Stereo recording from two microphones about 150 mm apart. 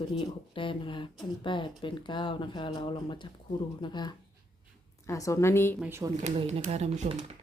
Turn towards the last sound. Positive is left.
turn(degrees=-45)  # may be behind; listen again after turning